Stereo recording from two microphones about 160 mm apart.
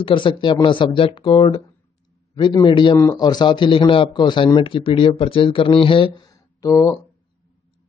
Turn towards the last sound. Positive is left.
turn(degrees=20)  # may be behind; listen again after turning